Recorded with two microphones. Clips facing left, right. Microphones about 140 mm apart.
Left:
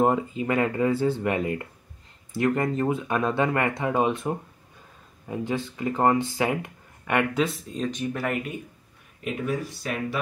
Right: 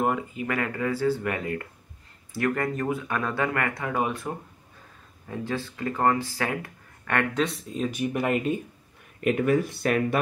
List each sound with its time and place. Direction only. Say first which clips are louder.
0.0 s speech: left 4 dB; 25° left (ahead or behind)
7.4 s speech: even; centre (ahead or behind); by 8.4 s 20° right (ahead or behind)
9.2 s speech: right 6 dB; 65° right (ahead or behind)